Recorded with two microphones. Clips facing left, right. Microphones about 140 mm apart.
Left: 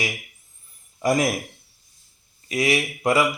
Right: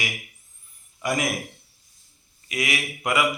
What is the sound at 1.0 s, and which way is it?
Speech, 35° left (ahead or behind).